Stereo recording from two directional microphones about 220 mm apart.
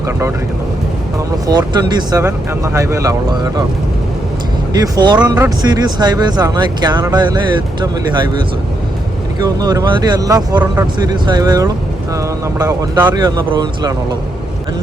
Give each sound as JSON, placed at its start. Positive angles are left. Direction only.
{"t": 1.5, "sound": "speech", "side_deg": -20}
{"t": 4.8, "sound": "speech", "side_deg": -20}
{"t": 9.4, "sound": "speech", "side_deg": -20}